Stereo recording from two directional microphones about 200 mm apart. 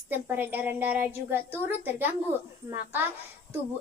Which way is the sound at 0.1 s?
10° right (ahead or behind).